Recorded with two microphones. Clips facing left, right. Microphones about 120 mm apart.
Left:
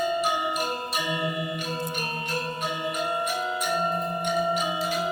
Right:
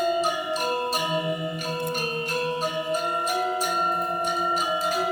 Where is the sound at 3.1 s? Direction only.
40° right (ahead or behind).